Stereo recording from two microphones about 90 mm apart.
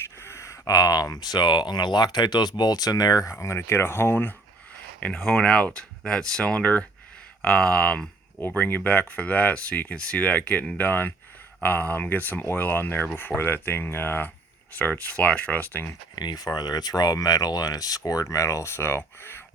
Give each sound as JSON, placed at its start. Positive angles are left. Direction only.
{"t": 0.0, "sound": "a sound", "side_deg": 30}
{"t": 0.8, "sound": "speech", "side_deg": 45}
{"t": 3.3, "sound": "speech", "side_deg": 30}
{"t": 5.1, "sound": "speech", "side_deg": 5}
{"t": 16.1, "sound": "speech", "side_deg": 50}